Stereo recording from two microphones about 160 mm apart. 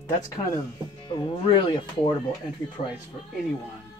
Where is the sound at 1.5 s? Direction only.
30° left (ahead or behind).